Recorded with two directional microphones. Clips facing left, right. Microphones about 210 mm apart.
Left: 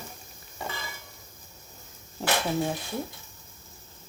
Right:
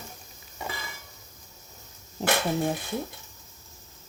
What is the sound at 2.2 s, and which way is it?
Speech, 20° right (ahead or behind).